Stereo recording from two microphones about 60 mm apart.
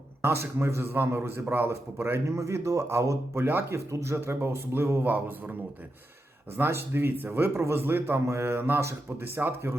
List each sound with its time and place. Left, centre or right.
0.2 s a man's voice: right
2.4 s speech: right
3.4 s speech: right
3.9 s a man's voice: right
6.6 s speech: right
8.1 s speech: right